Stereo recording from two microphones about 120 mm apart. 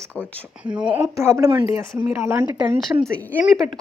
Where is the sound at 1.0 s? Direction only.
25° right (ahead or behind).